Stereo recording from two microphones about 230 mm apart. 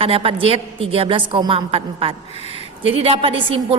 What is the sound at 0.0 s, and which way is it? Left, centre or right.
A woman's voice, right.